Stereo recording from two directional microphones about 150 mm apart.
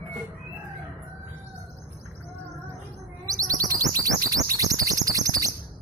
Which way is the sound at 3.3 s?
25° right (ahead or behind).